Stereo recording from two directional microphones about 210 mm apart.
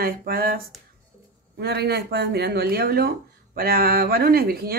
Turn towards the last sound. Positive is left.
turn(degrees=-45)  # may be behind; listen again after turning